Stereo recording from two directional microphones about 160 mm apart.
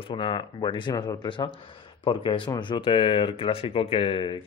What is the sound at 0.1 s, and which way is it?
Speech, 30° left (ahead or behind).